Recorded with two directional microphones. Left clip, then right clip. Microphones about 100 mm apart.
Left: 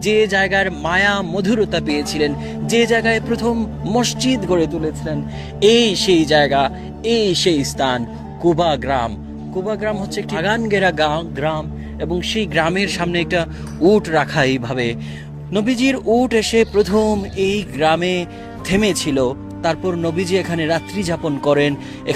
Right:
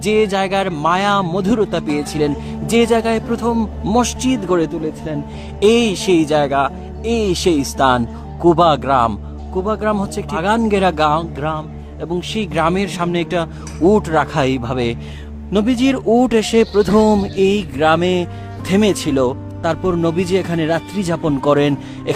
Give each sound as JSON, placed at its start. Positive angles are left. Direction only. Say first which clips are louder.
{"t": 0.0, "sound": "speech", "louder": "even", "side_deg": -30}
{"t": 1.9, "sound": "speech", "louder": "even", "side_deg": -20}
{"t": 2.6, "sound": "speech", "louder": "right 1 dB", "side_deg": -30}
{"t": 3.5, "sound": "speech", "louder": "right 2 dB", "side_deg": -35}
{"t": 3.9, "sound": "a man's voice", "louder": "right 1 dB", "side_deg": -15}
{"t": 6.4, "sound": "speech", "louder": "left 1 dB", "side_deg": 0}
{"t": 7.0, "sound": "speech", "louder": "left 1 dB", "side_deg": -15}
{"t": 11.3, "sound": "a man's voice", "louder": "left 1 dB", "side_deg": -15}